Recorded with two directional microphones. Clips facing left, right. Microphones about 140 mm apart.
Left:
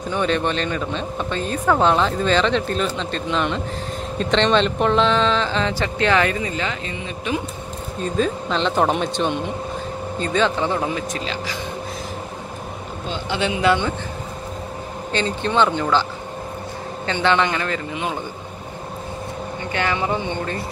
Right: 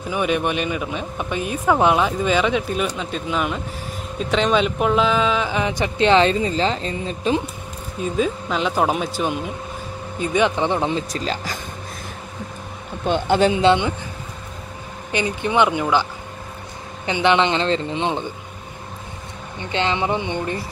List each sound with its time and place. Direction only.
0.1 s speech: 10° right (ahead or behind); by 7.4 s 35° right (ahead or behind)
8.0 s speech: 10° right (ahead or behind); by 11.6 s 45° right (ahead or behind)
13.0 s speech: 55° right (ahead or behind)
13.4 s speech: 30° right (ahead or behind)
15.1 s speech: 15° right (ahead or behind)
19.7 s speech: 20° right (ahead or behind)